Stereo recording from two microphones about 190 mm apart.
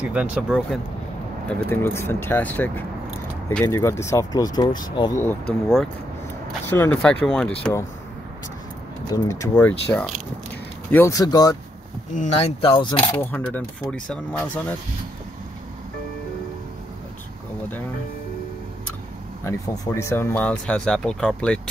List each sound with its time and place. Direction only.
0.0 s speech: 5° right (ahead or behind)
1.5 s speech: 10° left (ahead or behind)
6.7 s speech: 10° left (ahead or behind)
9.1 s speech: 15° left (ahead or behind)
12.2 s speech: 35° left (ahead or behind)
13.3 s speech: 10° left (ahead or behind)
19.4 s speech: 20° left (ahead or behind)